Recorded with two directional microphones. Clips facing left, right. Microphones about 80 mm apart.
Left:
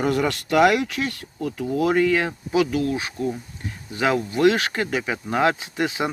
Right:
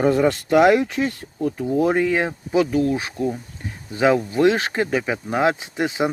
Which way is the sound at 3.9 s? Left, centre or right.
Right.